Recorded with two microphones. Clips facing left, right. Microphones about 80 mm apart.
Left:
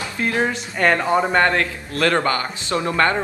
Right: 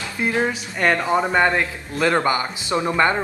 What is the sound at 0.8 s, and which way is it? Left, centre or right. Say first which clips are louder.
Speech: left 1 dB; centre.